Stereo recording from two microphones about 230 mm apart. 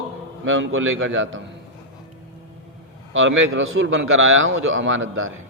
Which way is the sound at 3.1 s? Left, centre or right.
Right.